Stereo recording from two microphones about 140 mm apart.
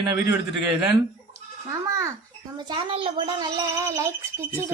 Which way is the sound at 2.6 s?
40° right (ahead or behind).